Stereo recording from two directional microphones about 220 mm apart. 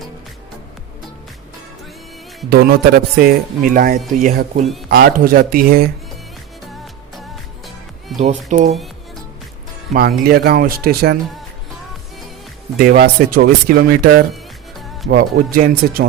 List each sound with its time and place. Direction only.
2.5 s speech: 45° right (ahead or behind)
8.2 s speech: 30° right (ahead or behind)
9.9 s speech: 45° right (ahead or behind)
12.8 s speech: 45° right (ahead or behind)
15.1 s speech: 40° right (ahead or behind)